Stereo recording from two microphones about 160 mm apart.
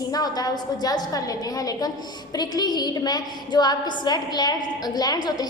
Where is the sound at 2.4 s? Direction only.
25° left (ahead or behind).